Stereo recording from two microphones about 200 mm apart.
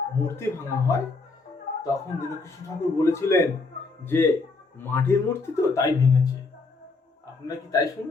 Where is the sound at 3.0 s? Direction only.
15° left (ahead or behind).